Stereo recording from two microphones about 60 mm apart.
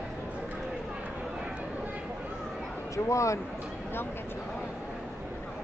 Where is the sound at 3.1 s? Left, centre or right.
Left.